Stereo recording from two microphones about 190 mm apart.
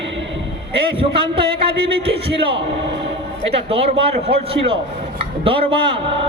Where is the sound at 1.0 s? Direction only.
30° right (ahead or behind).